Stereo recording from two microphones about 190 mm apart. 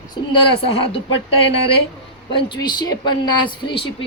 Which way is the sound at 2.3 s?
25° left (ahead or behind).